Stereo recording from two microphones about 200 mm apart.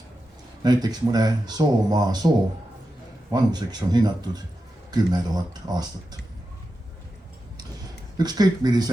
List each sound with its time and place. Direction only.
0.6 s speech: 20° right (ahead or behind)
3.3 s speech: 20° right (ahead or behind)
8.2 s speech: 20° right (ahead or behind)